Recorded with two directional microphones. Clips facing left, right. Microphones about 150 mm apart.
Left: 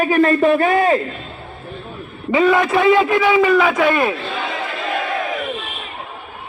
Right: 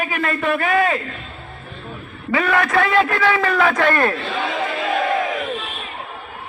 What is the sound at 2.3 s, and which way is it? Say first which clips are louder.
A man's voice: left 4 dB; 20° left (ahead or behind).